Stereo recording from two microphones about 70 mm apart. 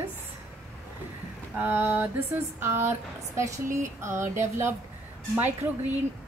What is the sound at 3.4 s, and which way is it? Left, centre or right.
Speech, right.